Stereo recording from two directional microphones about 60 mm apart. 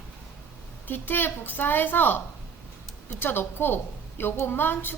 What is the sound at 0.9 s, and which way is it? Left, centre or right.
A woman's voice, left.